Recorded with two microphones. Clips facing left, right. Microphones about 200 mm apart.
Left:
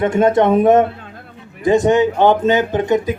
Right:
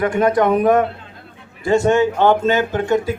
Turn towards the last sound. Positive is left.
turn(degrees=20)  # may be behind; listen again after turning